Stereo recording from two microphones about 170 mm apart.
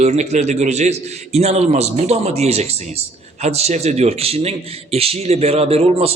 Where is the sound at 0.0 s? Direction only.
40° right (ahead or behind).